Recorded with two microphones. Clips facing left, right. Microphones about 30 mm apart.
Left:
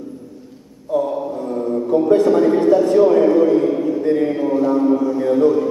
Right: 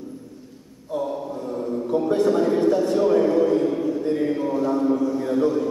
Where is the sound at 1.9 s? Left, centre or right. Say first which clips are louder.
Left 6 dB; centre.